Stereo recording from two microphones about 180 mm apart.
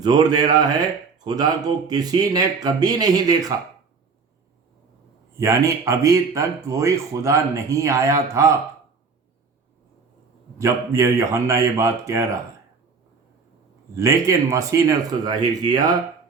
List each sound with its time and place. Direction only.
0.0 s speech: 20° right (ahead or behind)
5.4 s speech: 15° right (ahead or behind)
10.6 s speech: 15° right (ahead or behind)
13.9 s speech: 15° right (ahead or behind)